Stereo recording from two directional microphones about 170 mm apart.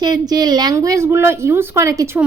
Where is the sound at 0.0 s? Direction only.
25° right (ahead or behind).